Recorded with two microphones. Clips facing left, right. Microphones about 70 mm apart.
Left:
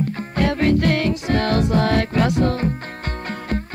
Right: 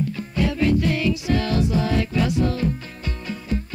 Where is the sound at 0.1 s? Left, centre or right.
Left.